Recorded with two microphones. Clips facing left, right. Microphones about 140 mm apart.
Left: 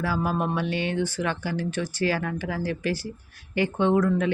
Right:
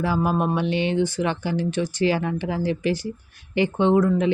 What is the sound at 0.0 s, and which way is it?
Speech, 20° right (ahead or behind).